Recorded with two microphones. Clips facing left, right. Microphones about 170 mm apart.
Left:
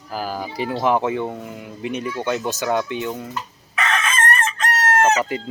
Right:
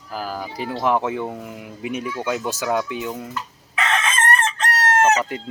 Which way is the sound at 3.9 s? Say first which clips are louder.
Right 1 dB; 25° right (ahead or behind).